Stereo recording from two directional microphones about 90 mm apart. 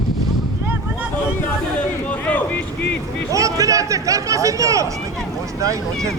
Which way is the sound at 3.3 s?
35° right (ahead or behind).